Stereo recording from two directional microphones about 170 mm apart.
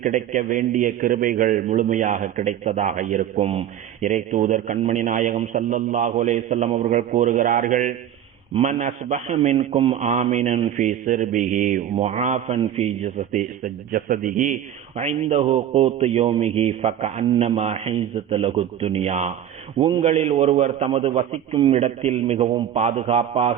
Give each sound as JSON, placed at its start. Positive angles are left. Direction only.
{"t": 0.0, "sound": "a man's voice", "side_deg": -45}